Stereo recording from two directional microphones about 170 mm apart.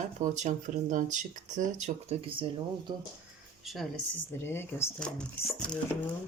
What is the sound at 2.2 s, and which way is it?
Speech, 30° right (ahead or behind).